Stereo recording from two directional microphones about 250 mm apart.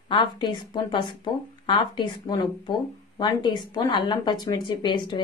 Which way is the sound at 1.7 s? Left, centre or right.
Centre.